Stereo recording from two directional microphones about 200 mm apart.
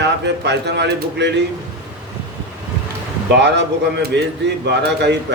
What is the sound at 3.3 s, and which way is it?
Speech, 60° right (ahead or behind).